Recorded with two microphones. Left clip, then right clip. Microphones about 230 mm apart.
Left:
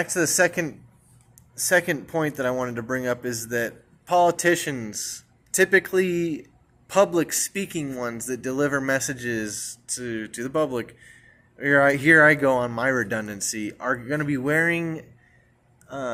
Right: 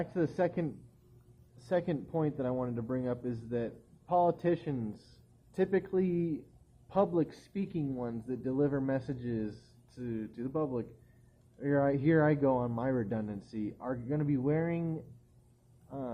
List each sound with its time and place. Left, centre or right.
0.0 s speech: centre
4.1 s speech: left
4.4 s speech: centre
6.9 s speech: left
7.2 s speech: centre
10.4 s speech: left
12.8 s speech: centre
15.9 s speech: left